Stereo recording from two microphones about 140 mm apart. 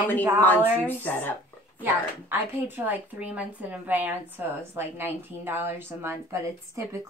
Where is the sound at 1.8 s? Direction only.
15° right (ahead or behind).